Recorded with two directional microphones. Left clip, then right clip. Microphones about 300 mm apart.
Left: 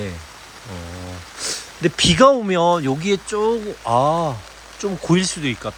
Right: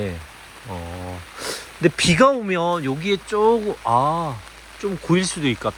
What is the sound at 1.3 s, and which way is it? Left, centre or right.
Speech, centre.